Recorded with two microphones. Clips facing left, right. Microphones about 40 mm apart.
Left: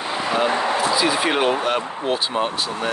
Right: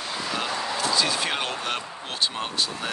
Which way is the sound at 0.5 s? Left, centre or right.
Left.